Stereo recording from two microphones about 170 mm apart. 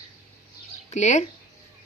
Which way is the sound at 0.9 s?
45° left (ahead or behind).